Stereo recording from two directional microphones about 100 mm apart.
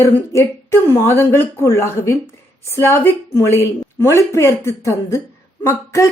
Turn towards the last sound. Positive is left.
turn(degrees=25)  # may be behind; listen again after turning